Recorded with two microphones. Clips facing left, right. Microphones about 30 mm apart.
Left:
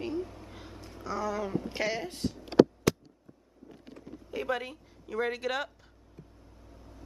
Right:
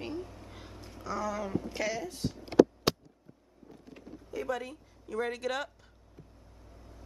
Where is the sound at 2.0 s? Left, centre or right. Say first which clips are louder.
Left 2 dB; left.